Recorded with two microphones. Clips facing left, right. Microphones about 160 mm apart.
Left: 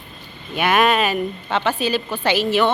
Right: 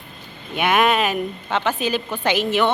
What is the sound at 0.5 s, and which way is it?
Speech, 10° right (ahead or behind).